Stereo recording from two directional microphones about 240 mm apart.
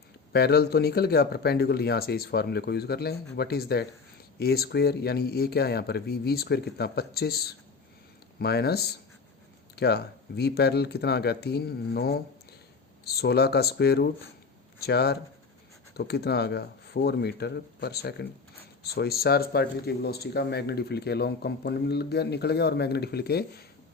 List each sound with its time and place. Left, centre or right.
0.3 s speech: left